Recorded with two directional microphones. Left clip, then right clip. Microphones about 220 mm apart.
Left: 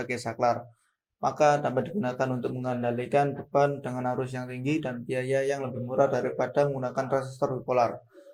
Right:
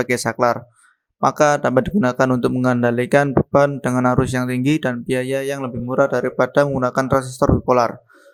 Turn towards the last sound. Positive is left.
turn(degrees=-45)  # may be behind; listen again after turning